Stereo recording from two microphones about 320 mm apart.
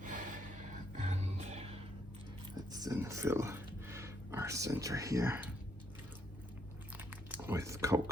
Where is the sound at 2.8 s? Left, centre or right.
Centre.